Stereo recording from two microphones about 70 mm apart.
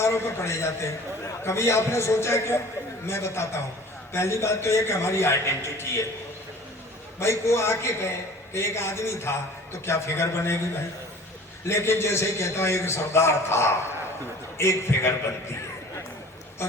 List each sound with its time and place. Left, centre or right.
0.0 s a man's voice: left
7.2 s a man's voice: left